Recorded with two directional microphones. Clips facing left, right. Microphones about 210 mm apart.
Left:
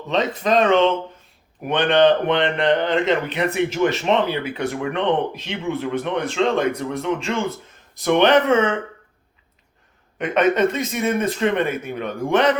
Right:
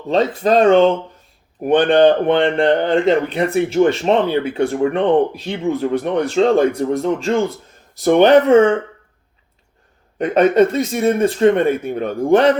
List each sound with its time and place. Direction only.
0.1 s a man's voice: 35° right (ahead or behind)
10.2 s a man's voice: 35° right (ahead or behind)